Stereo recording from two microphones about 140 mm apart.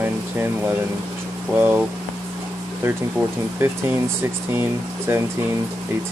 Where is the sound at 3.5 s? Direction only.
15° right (ahead or behind).